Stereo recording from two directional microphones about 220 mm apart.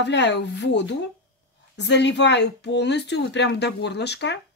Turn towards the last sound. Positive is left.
turn(degrees=50)  # may be behind; listen again after turning